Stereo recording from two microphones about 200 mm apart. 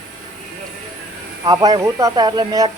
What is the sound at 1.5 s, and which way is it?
Speech, 20° right (ahead or behind).